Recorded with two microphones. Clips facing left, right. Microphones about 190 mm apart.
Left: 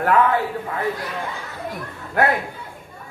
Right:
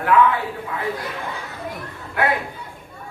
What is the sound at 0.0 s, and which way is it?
Speech, 45° left (ahead or behind).